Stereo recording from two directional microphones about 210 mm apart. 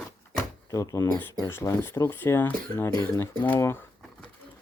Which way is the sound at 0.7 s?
15° left (ahead or behind).